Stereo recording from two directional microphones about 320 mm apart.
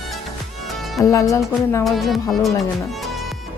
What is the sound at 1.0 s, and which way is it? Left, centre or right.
Speech, centre.